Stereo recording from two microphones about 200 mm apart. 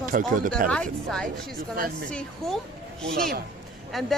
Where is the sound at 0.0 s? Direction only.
40° right (ahead or behind).